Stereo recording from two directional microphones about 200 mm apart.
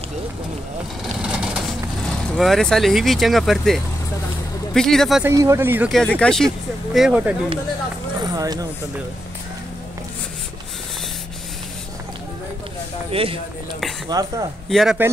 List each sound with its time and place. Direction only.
1.2 s bird: 5° right (ahead or behind)
2.3 s speech: centre (ahead or behind)
5.2 s speech: 15° right (ahead or behind)
5.9 s speech: 5° left (ahead or behind)
8.4 s speech: 20° right (ahead or behind)
13.1 s speech: 30° right (ahead or behind)
14.7 s speech: centre (ahead or behind)